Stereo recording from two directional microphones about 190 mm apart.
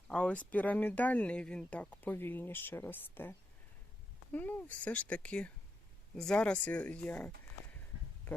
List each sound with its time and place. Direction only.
0.1 s speech: 5° left (ahead or behind)